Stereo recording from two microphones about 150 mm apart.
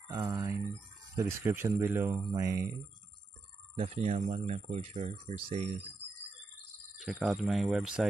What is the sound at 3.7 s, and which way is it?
Speech, 45° right (ahead or behind).